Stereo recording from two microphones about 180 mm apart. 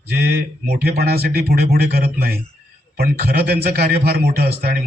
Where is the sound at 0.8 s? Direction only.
60° right (ahead or behind).